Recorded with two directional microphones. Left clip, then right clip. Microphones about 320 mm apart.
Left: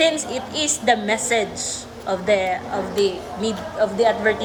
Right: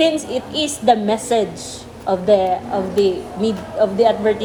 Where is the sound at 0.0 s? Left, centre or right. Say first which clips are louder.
Right 2 dB; right.